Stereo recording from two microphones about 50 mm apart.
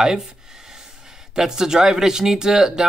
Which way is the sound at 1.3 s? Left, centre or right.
Centre.